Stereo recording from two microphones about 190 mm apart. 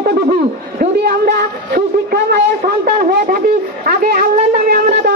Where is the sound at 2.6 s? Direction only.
50° right (ahead or behind).